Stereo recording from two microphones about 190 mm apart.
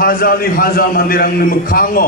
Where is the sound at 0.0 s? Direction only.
50° left (ahead or behind).